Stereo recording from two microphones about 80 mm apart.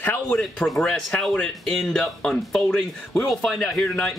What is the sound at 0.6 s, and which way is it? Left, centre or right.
Speech, centre.